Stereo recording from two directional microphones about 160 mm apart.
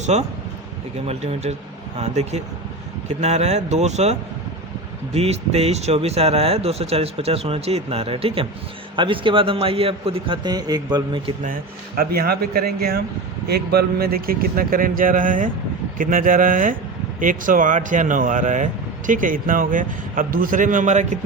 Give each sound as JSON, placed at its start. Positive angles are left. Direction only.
{"t": 0.0, "sound": "speech", "side_deg": -45}
{"t": 11.9, "sound": "speech", "side_deg": -75}